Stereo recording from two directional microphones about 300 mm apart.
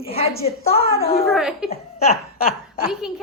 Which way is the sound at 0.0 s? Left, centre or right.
Centre.